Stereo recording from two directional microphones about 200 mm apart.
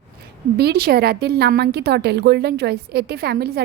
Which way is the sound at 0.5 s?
50° right (ahead or behind).